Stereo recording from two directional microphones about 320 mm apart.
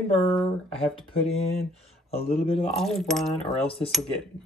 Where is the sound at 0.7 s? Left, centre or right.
Centre.